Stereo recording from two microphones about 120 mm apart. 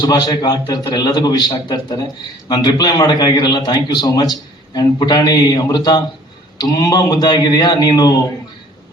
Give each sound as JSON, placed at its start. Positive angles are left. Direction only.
{"t": 0.0, "sound": "a man's voice", "side_deg": 35}